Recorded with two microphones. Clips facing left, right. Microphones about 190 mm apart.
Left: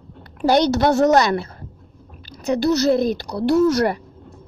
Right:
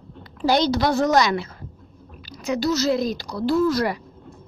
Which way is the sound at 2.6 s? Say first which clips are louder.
Left 4 dB; 60° left (ahead or behind).